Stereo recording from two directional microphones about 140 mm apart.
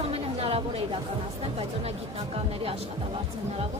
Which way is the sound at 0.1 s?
45° right (ahead or behind).